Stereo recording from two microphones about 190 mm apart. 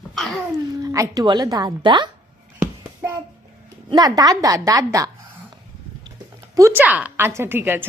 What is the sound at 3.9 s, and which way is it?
A woman's voice, 20° right (ahead or behind).